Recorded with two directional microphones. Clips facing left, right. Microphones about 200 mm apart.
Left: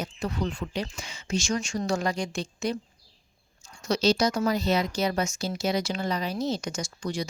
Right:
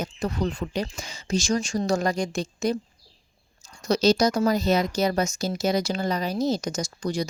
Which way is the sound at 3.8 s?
40° right (ahead or behind).